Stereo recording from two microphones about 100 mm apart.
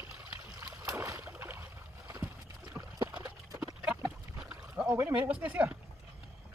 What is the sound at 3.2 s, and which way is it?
Clip-clop, 35° right (ahead or behind).